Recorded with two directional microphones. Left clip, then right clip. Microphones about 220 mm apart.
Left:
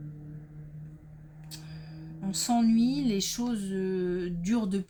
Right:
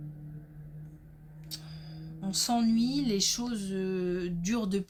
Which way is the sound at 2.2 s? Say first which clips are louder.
Left 1 dB; 25° right (ahead or behind).